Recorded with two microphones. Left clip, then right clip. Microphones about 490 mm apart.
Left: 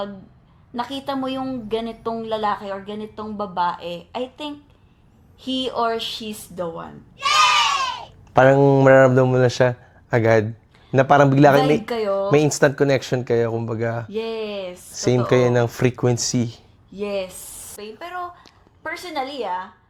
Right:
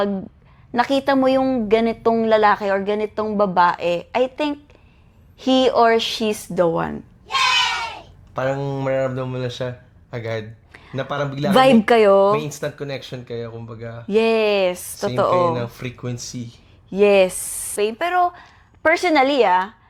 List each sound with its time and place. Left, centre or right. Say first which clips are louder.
0.7 s a woman's voice: right 9 dB; right
8.3 s speech: left 10 dB; left
11.6 s a woman's voice: right 7 dB; right
12.3 s speech: left 5 dB; left
14.1 s a woman's voice: right 10 dB; right
15.0 s speech: even; left
16.9 s a woman's voice: right 12 dB; right